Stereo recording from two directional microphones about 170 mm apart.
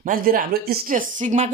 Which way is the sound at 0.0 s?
55° right (ahead or behind).